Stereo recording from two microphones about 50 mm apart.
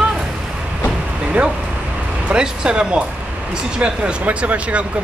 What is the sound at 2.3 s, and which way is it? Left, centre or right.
Speech, centre.